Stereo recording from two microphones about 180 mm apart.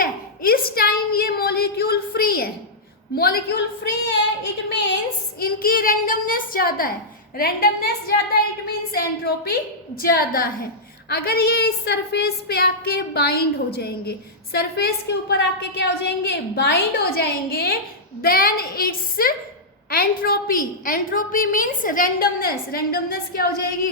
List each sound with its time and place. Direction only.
0.0 s a sound: 55° left (ahead or behind)
3.2 s a woman's voice: 60° left (ahead or behind)
5.4 s a woman's voice: 55° left (ahead or behind)